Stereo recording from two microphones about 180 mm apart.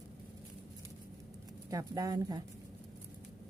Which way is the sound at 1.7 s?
20° right (ahead or behind).